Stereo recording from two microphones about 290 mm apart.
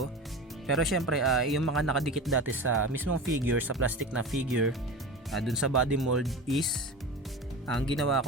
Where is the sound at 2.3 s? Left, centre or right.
Right.